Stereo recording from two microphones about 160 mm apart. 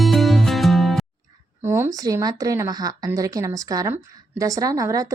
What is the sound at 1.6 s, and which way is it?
Speech, 15° right (ahead or behind).